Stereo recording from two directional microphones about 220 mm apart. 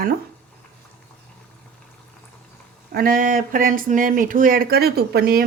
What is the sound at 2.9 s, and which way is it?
Speech, 40° right (ahead or behind).